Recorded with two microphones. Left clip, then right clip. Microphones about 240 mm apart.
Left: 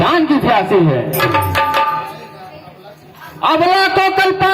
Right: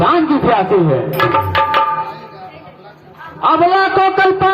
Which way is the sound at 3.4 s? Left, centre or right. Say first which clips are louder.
Right 1 dB; left.